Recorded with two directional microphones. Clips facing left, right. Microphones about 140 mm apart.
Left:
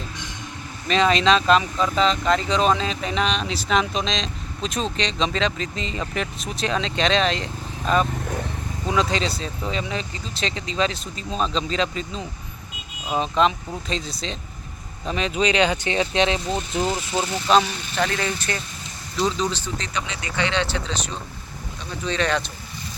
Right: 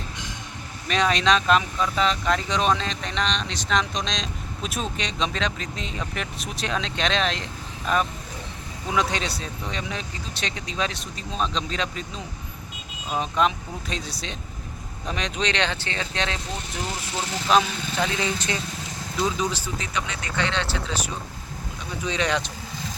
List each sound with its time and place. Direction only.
0.9 s speech: centre (ahead or behind); by 16.4 s 20° left (ahead or behind)
17.5 s speech: centre (ahead or behind)
18.0 s speech: 15° right (ahead or behind)